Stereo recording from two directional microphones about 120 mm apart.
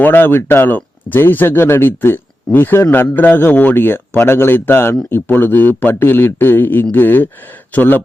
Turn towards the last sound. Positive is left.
turn(degrees=15)  # may be behind; listen again after turning